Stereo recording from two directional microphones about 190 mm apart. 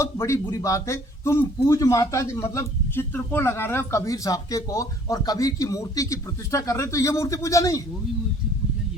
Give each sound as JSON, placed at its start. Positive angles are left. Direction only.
{"t": 0.0, "sound": "speech", "side_deg": 15}